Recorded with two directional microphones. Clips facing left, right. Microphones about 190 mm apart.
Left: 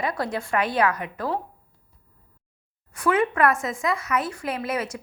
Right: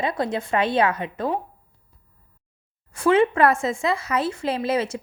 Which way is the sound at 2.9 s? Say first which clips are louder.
Right 4 dB; 25° right (ahead or behind).